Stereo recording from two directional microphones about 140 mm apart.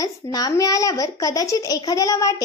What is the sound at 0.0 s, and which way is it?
Speech, 25° left (ahead or behind).